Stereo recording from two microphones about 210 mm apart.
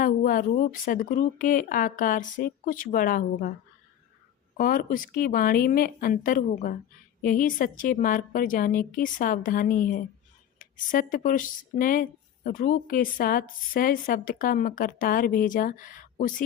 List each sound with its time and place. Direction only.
0.0 s speech: 40° left (ahead or behind)
4.5 s speech: 40° left (ahead or behind)